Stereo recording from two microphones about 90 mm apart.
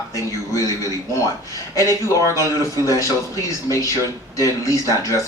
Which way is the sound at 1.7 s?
35° left (ahead or behind).